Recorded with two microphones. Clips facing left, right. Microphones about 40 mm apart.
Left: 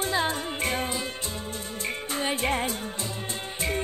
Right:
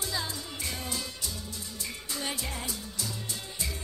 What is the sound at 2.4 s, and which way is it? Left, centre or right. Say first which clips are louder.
Music: left 11 dB; left.